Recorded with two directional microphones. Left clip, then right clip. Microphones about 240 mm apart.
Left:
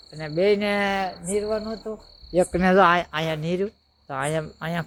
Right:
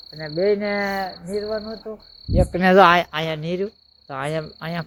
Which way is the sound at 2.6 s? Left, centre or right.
Centre.